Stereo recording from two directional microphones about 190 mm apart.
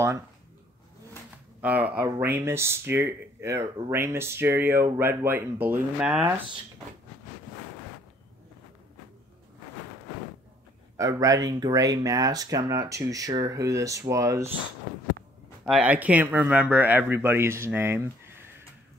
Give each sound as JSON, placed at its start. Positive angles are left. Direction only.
{"t": 1.6, "sound": "speech", "side_deg": -5}
{"t": 11.0, "sound": "speech", "side_deg": -15}
{"t": 15.6, "sound": "speech", "side_deg": -5}